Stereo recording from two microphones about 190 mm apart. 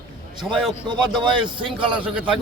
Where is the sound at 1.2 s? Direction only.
25° right (ahead or behind).